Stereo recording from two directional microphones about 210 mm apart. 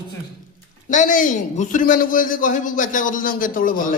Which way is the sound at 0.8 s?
35° left (ahead or behind).